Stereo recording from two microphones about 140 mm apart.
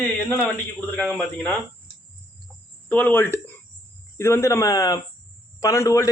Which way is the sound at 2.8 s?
10° left (ahead or behind).